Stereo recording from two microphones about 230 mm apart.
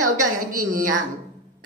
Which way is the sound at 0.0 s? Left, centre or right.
Right.